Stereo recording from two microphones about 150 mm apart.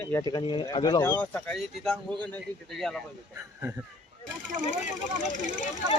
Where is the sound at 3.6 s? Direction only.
15° right (ahead or behind).